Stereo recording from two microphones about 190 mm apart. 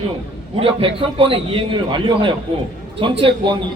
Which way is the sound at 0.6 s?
30° right (ahead or behind).